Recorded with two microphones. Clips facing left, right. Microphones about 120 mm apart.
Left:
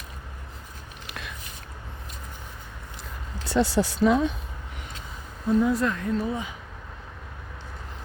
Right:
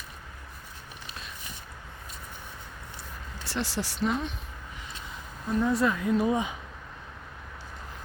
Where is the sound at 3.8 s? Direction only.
90° left.